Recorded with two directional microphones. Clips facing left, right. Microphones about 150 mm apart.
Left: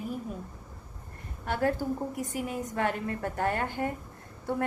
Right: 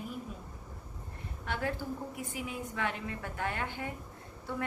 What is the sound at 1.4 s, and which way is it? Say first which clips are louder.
A woman's voice: left 7 dB; 45° left (ahead or behind).